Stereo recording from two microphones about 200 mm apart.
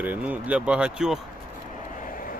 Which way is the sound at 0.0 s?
10° right (ahead or behind).